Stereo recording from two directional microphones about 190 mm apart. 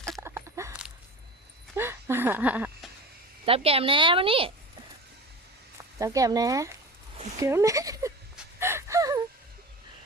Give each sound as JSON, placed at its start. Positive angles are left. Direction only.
{"t": 0.2, "sound": "a sound", "side_deg": -15}
{"t": 3.4, "sound": "speech", "side_deg": -30}
{"t": 5.7, "sound": "speech", "side_deg": -15}
{"t": 8.5, "sound": "gasp", "side_deg": -15}